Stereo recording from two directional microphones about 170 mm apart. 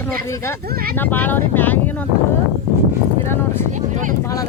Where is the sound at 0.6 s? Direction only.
60° right (ahead or behind).